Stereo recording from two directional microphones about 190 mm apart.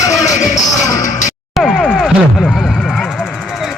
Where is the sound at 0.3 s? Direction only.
40° left (ahead or behind).